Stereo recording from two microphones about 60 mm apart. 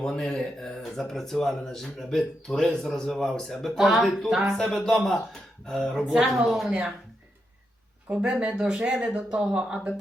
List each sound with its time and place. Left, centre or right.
0.0 s speech: centre
6.1 s speech: centre
8.1 s speech: centre